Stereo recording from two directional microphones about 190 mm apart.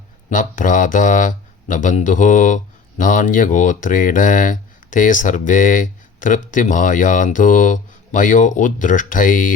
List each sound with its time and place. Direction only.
0.3 s speech: 45° left (ahead or behind)